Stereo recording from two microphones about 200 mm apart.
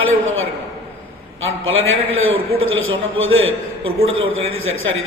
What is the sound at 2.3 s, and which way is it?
A man's voice, 85° right.